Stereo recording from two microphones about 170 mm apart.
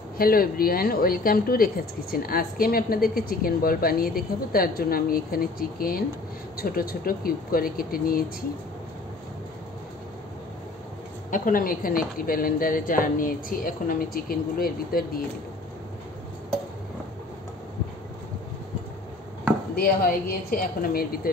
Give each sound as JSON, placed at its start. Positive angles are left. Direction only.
{"t": 0.2, "sound": "a woman's voice", "side_deg": 60}
{"t": 11.2, "sound": "a woman's voice", "side_deg": 50}
{"t": 19.7, "sound": "a woman's voice", "side_deg": 60}